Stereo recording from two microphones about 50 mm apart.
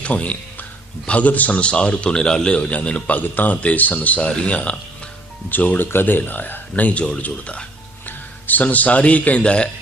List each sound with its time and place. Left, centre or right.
0.0 s a man's voice: left
5.5 s a man's voice: left
8.0 s a man's voice: left